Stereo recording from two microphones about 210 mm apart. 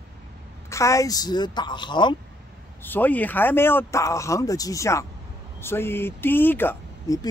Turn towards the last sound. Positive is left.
turn(degrees=10)  # may be behind; listen again after turning